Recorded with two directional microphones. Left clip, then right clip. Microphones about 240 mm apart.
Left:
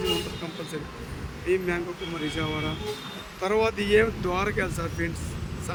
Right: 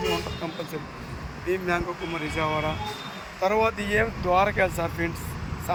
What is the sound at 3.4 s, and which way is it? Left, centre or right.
Speech, centre.